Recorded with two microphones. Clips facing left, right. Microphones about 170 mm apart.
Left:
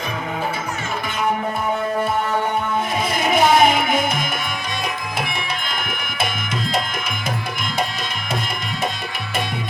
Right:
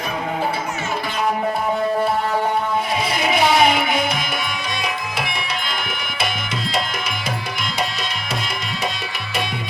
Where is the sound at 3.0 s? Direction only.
50° left (ahead or behind).